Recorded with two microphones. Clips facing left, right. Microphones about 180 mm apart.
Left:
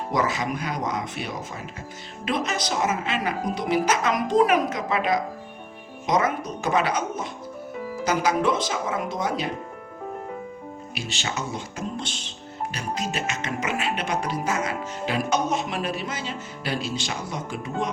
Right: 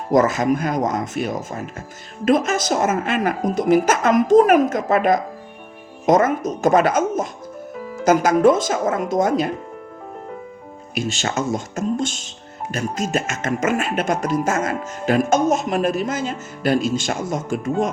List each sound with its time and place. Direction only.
0.1 s music: 45° right (ahead or behind)
10.9 s music: 45° right (ahead or behind)